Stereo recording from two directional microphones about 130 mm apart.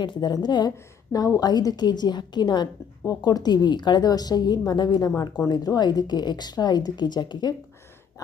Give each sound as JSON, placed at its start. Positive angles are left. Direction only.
{"t": 0.0, "sound": "a woman's voice", "side_deg": 35}